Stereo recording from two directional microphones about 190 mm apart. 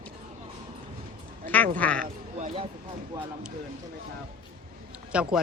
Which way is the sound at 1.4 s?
10° left (ahead or behind).